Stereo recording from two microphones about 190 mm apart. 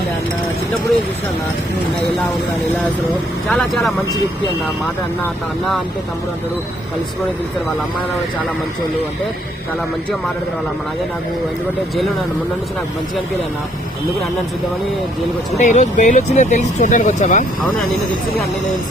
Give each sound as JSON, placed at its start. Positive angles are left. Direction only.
{"t": 3.5, "sound": "speech", "side_deg": 0}
{"t": 15.5, "sound": "speech", "side_deg": 40}